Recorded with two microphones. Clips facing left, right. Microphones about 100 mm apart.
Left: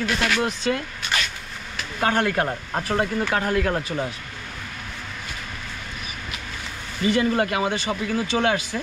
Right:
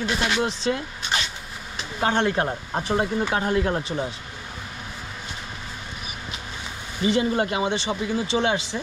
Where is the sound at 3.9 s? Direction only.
15° right (ahead or behind).